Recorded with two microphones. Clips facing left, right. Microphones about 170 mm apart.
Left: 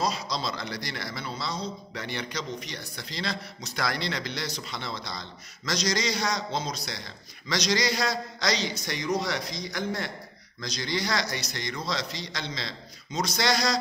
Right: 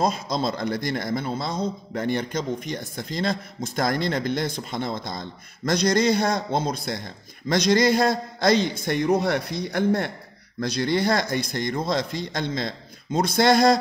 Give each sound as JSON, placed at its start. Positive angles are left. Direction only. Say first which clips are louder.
{"t": 0.0, "sound": "a man's voice", "louder": "right 6 dB", "side_deg": -50}